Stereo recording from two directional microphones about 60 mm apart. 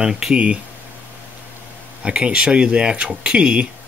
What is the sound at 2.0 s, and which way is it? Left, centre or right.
Speech, centre.